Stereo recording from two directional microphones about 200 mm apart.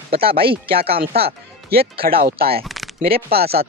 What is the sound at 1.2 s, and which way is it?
Speech, 50° right (ahead or behind).